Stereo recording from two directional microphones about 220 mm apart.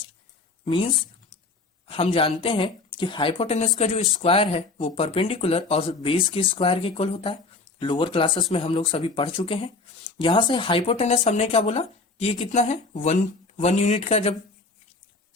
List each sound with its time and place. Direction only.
0.6 s speech: 25° left (ahead or behind)